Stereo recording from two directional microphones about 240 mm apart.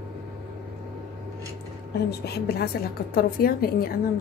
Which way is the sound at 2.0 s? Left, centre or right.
Left.